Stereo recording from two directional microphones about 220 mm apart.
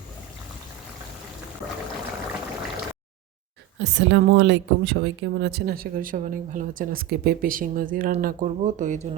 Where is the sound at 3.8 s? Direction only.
55° right (ahead or behind).